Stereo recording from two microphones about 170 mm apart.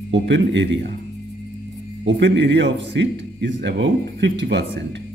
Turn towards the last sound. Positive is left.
turn(degrees=-90)